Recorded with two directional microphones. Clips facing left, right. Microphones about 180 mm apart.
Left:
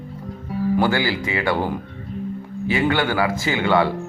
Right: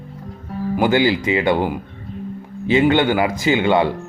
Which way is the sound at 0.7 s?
20° right (ahead or behind).